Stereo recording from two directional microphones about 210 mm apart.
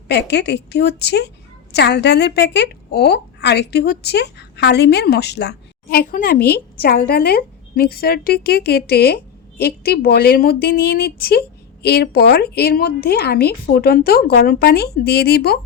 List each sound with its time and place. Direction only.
0.1 s a woman's voice: 50° left (ahead or behind)